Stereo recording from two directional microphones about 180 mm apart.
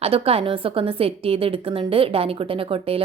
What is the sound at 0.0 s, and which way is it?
A woman's voice, 35° right (ahead or behind).